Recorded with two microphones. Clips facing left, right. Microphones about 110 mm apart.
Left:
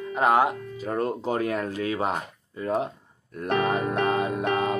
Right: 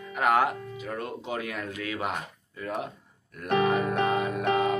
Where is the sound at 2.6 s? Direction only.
30° left (ahead or behind).